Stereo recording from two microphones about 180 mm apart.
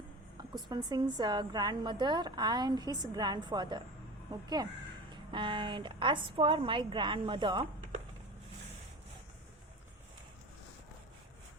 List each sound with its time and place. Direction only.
0.7 s a woman's voice: 25° right (ahead or behind)